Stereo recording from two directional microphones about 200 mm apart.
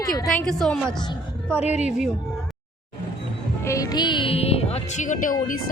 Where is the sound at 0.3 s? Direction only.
Centre (ahead or behind).